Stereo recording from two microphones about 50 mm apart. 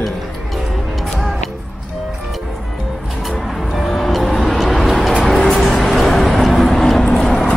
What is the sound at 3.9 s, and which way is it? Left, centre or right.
Vehicle, centre.